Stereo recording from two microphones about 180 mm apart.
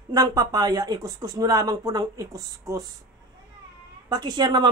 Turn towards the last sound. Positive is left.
turn(degrees=-25)  # may be behind; listen again after turning